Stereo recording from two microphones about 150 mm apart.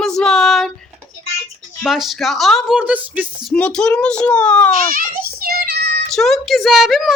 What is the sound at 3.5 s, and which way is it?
A woman's voice, 5° left (ahead or behind).